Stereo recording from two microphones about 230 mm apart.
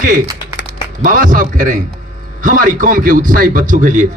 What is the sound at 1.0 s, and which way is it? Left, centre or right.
A man's voice, right.